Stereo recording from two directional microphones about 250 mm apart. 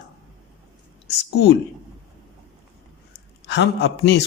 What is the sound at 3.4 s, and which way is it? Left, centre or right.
Speech, left.